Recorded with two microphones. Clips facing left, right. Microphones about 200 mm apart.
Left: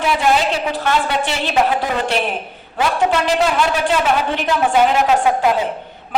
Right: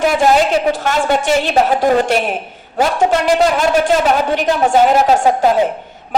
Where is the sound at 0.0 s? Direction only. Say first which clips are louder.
Right 4 dB; 45° right (ahead or behind).